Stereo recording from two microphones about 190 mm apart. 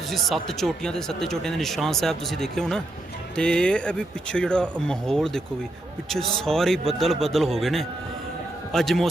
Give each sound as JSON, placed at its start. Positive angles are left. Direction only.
{"t": 0.4, "sound": "speech", "side_deg": 5}